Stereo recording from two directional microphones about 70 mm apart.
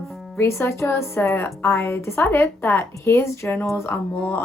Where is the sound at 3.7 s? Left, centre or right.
Left.